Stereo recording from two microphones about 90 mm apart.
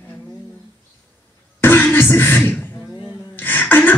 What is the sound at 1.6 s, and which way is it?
Beatboxing, 20° left (ahead or behind).